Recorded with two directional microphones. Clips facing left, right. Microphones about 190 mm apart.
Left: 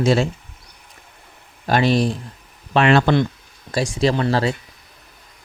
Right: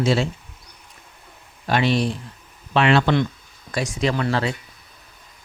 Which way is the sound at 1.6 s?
40° left (ahead or behind).